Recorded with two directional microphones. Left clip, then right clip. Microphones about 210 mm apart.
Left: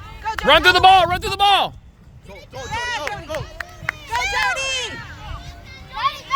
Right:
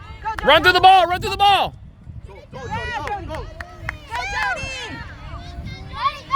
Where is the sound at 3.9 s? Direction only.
25° left (ahead or behind).